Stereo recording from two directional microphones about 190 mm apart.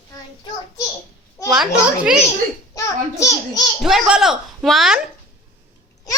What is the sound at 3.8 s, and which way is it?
A woman's voice, centre (ahead or behind).